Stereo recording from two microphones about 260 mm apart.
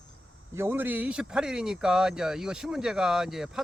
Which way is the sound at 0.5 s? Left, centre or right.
Centre.